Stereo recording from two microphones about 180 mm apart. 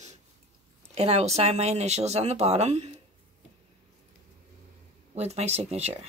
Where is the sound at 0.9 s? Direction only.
35° right (ahead or behind).